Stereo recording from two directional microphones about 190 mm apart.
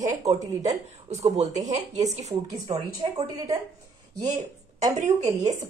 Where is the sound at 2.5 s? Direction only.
20° right (ahead or behind).